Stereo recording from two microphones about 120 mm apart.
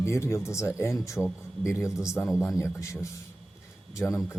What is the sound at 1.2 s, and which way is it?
Speech, 5° left (ahead or behind).